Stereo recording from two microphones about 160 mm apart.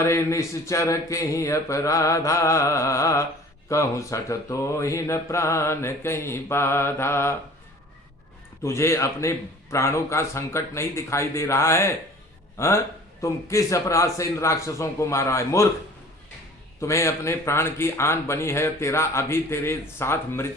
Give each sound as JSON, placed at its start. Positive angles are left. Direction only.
{"t": 0.0, "sound": "a man's voice", "side_deg": 15}
{"t": 8.6, "sound": "a man's voice", "side_deg": 15}
{"t": 16.8, "sound": "a man's voice", "side_deg": 15}